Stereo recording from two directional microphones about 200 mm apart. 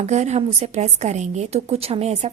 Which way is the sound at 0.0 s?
35° right (ahead or behind).